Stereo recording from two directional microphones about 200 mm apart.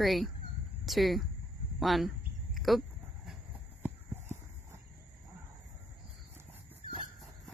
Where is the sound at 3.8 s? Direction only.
10° right (ahead or behind).